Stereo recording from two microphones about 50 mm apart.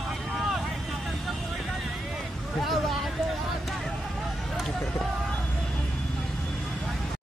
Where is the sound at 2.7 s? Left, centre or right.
Centre.